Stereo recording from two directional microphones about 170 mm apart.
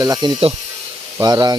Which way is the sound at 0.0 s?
25° right (ahead or behind).